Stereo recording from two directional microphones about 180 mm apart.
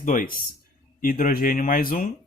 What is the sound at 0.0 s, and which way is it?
Speech, 50° left (ahead or behind).